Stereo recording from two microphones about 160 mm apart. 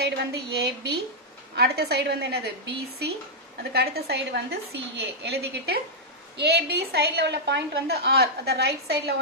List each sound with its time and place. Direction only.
0.0 s a woman's voice: 90° right